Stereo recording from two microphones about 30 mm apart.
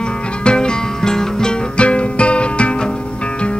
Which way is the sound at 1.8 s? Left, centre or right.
Left.